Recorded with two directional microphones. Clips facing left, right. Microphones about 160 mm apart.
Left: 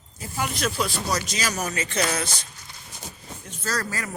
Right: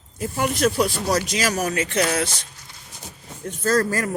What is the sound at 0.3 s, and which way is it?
Speech, 50° right (ahead or behind).